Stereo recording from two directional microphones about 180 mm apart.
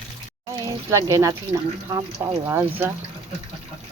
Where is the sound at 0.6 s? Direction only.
15° right (ahead or behind).